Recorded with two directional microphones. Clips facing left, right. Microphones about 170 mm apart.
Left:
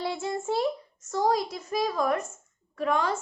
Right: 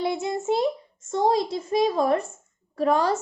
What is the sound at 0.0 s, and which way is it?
A woman's voice, 20° right (ahead or behind).